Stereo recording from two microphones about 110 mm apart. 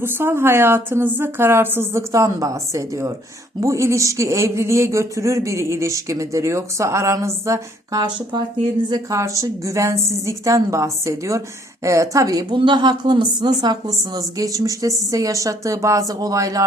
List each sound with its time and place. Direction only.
0.0 s speech: 20° right (ahead or behind)
8.0 s a woman's voice: 40° right (ahead or behind)
8.9 s speech: 30° right (ahead or behind)
12.5 s a woman's voice: 45° right (ahead or behind)